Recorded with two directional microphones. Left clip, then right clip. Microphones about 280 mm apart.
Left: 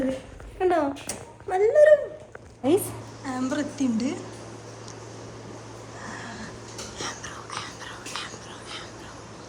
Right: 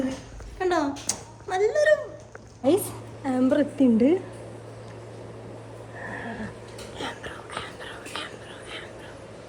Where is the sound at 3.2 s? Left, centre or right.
Centre.